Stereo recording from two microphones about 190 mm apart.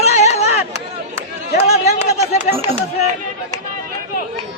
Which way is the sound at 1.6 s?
35° left (ahead or behind).